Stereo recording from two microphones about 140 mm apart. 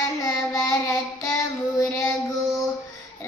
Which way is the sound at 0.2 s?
20° left (ahead or behind).